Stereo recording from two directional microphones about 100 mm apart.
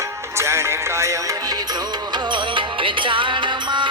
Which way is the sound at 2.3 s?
55° right (ahead or behind).